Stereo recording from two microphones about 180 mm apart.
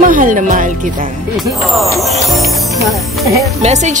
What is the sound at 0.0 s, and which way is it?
Speech, 50° right (ahead or behind).